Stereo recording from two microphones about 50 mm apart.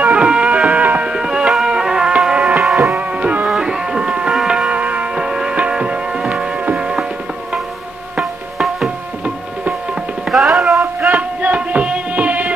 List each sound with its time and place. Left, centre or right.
0.0 s music: right
1.0 s music: centre
2.3 s music: right
2.6 s music: centre
2.9 s music: right
3.4 s a sound: centre
4.5 s music: centre
4.7 s music: right
6.6 s a sound: right
8.2 s music: centre
10.3 s a sound: centre
11.1 s music: right